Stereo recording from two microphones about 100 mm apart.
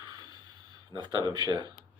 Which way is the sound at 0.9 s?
40° right (ahead or behind).